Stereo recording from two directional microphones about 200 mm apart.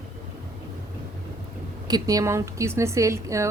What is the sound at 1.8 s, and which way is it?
A woman's voice, 20° right (ahead or behind).